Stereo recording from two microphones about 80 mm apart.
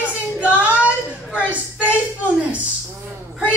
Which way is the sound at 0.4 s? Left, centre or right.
Centre.